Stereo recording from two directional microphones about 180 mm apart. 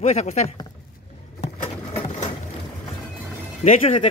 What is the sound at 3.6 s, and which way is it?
Speech, 35° left (ahead or behind).